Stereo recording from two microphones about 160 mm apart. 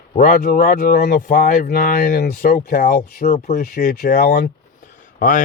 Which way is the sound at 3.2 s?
50° left (ahead or behind).